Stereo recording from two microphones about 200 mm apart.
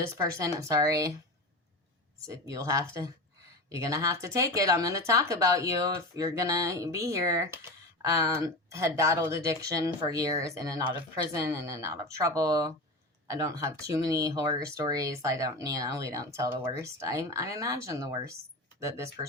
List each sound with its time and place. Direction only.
0.0 s speech: 15° right (ahead or behind)
2.2 s speech: 15° right (ahead or behind)